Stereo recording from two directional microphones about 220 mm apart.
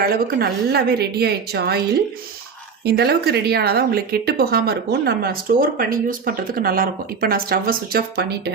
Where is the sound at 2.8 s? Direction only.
45° right (ahead or behind).